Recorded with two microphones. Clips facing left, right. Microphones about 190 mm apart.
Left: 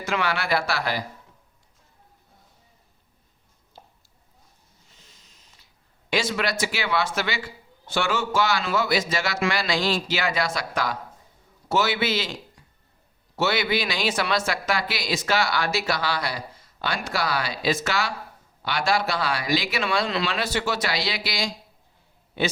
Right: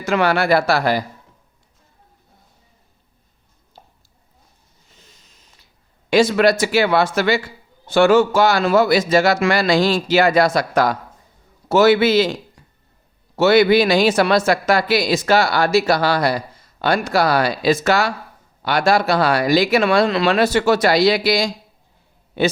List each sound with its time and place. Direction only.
0.0 s speech: 45° right (ahead or behind)
6.1 s speech: 40° right (ahead or behind)